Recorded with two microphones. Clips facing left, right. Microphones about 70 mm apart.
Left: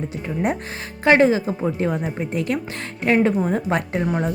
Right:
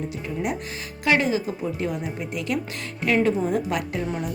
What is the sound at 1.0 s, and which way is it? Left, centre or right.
A woman's voice, left.